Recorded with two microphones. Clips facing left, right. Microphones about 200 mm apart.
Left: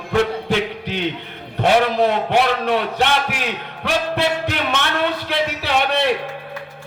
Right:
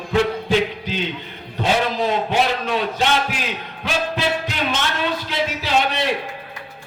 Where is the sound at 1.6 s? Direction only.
60° left (ahead or behind).